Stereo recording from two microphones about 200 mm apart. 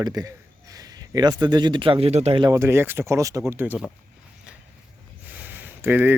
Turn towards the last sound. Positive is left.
turn(degrees=-10)  # may be behind; listen again after turning